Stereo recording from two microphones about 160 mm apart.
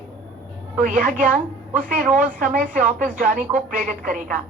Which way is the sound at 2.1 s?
55° right (ahead or behind).